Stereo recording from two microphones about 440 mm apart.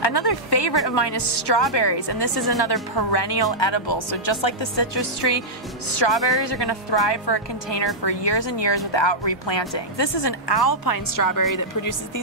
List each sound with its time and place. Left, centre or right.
0.0 s a sound: left
0.8 s a woman's voice: left
3.5 s speech: left